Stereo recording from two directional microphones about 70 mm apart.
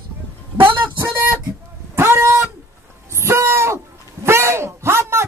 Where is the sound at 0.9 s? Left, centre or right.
Right.